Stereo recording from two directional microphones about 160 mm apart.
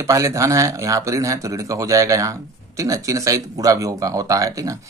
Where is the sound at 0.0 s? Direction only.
20° right (ahead or behind).